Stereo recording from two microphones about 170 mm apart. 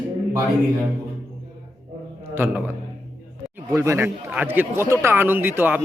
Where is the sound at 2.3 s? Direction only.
10° right (ahead or behind).